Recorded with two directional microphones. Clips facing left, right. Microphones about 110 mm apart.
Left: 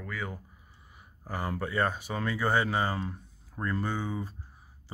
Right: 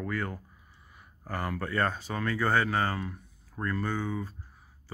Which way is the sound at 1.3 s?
15° left (ahead or behind).